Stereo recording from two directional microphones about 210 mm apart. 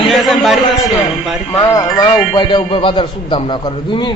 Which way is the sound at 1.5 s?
20° left (ahead or behind).